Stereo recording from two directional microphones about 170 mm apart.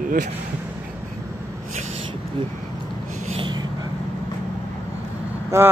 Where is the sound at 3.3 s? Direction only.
30° right (ahead or behind).